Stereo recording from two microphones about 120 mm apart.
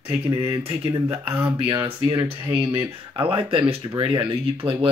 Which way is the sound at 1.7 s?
25° right (ahead or behind).